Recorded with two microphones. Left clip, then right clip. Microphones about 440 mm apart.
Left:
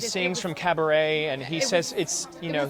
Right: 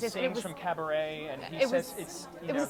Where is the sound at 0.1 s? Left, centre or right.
Left.